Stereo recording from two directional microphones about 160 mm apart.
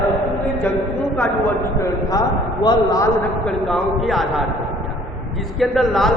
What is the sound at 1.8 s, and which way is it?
A man's voice, 20° left (ahead or behind).